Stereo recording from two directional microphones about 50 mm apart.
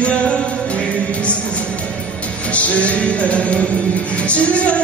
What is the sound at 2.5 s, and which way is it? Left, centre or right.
Music, left.